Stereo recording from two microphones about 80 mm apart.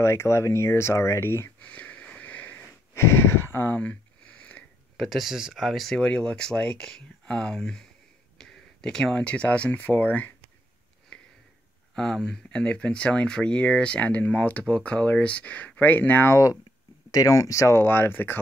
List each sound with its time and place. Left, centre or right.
0.0 s speech: left
1.6 s wheeze: centre
2.9 s a sound: left
3.6 s a sound: centre
4.9 s speech: centre
5.9 s speech: centre
11.1 s sniff: centre
11.9 s speech: centre; by 16.3 s left
17.1 s speech: left